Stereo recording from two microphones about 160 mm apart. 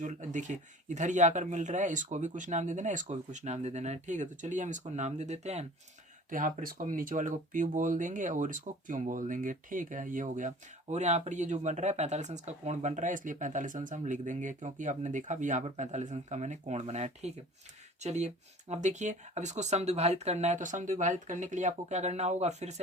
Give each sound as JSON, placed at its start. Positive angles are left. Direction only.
{"t": 0.0, "sound": "speech", "side_deg": -50}
{"t": 6.3, "sound": "speech", "side_deg": -60}